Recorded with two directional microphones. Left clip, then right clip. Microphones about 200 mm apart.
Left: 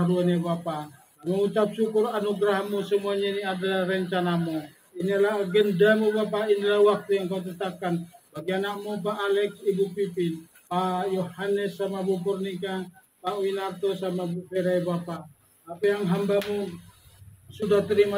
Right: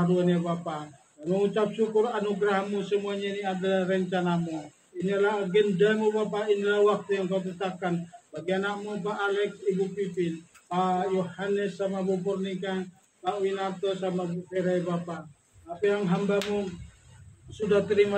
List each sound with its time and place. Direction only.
0.0 s speech: 40° left (ahead or behind)